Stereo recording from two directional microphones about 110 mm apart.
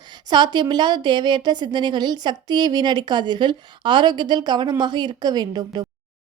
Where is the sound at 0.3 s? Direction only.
45° right (ahead or behind).